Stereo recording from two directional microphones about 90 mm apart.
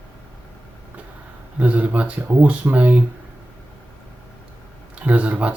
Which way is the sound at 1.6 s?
15° right (ahead or behind).